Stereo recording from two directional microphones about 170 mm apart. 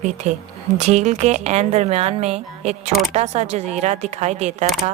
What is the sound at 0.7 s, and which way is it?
A woman's voice, 45° right (ahead or behind).